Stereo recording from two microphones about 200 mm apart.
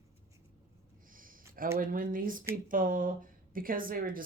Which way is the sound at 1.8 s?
45° right (ahead or behind).